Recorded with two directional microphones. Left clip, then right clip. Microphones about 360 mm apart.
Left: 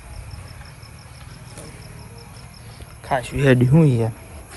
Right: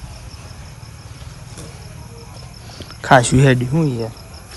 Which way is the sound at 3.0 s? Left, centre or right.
Centre.